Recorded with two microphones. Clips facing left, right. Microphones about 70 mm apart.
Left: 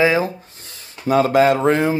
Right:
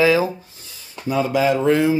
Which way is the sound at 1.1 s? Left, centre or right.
Left.